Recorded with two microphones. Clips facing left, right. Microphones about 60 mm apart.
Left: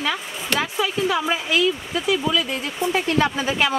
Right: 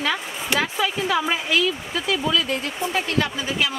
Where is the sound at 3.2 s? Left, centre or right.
Left.